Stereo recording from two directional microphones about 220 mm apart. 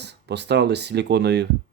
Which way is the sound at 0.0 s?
50° right (ahead or behind).